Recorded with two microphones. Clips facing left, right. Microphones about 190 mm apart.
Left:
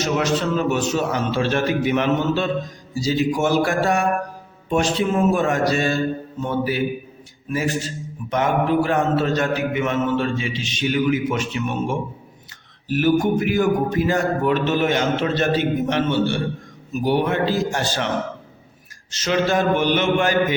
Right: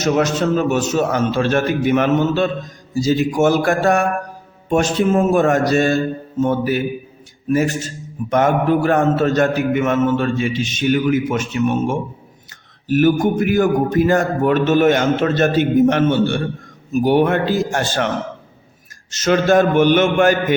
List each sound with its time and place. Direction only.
0.0 s a man's voice: 45° right (ahead or behind)
7.5 s a man's voice: 50° right (ahead or behind)
19.1 s a man's voice: 50° right (ahead or behind)